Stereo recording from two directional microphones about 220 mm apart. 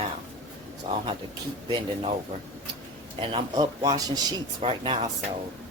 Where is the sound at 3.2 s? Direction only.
20° right (ahead or behind).